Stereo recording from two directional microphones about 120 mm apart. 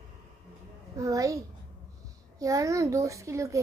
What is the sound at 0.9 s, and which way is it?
A woman's voice, 25° right (ahead or behind).